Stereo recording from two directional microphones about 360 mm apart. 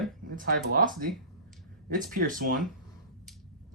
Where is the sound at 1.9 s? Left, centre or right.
Right.